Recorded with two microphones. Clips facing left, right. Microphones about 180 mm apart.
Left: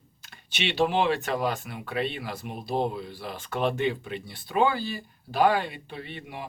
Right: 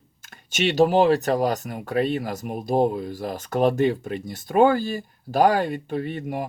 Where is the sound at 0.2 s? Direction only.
45° right (ahead or behind).